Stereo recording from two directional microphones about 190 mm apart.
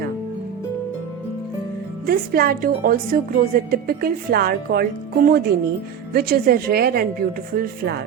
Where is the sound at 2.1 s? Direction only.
50° right (ahead or behind).